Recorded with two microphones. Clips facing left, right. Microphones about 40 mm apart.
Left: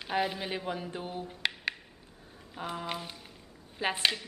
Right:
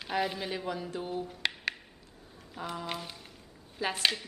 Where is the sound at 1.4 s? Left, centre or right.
Centre.